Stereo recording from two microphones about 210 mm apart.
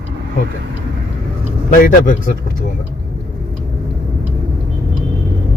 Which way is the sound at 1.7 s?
40° left (ahead or behind).